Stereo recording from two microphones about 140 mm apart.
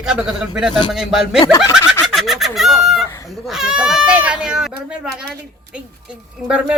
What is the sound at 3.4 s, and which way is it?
A man's voice, 5° right (ahead or behind).